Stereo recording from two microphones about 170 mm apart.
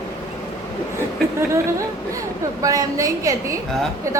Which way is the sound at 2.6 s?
20° right (ahead or behind).